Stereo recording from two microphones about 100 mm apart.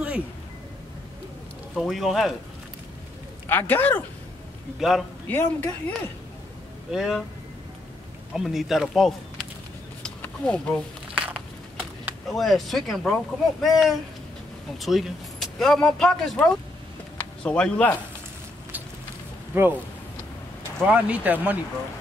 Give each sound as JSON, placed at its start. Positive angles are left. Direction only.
{"t": 1.8, "sound": "speech", "side_deg": 0}
{"t": 3.4, "sound": "a man's voice", "side_deg": 20}
{"t": 4.7, "sound": "speech", "side_deg": -5}
{"t": 5.3, "sound": "speech", "side_deg": 15}
{"t": 6.9, "sound": "speech", "side_deg": -5}
{"t": 8.3, "sound": "speech", "side_deg": -5}
{"t": 10.2, "sound": "speech", "side_deg": 10}
{"t": 11.1, "sound": "a sound", "side_deg": -10}
{"t": 12.3, "sound": "speech", "side_deg": 0}
{"t": 19.5, "sound": "speech", "side_deg": -20}
{"t": 20.8, "sound": "speech", "side_deg": -15}